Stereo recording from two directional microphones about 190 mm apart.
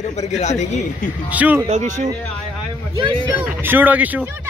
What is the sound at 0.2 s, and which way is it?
Speech, 35° left (ahead or behind).